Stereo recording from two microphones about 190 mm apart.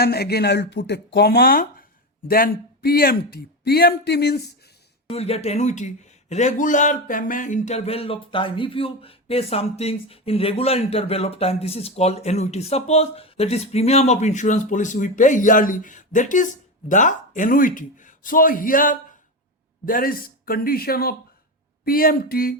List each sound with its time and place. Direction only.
0.0 s speech: 55° left (ahead or behind)
5.1 s speech: 35° left (ahead or behind); by 22.5 s 50° left (ahead or behind)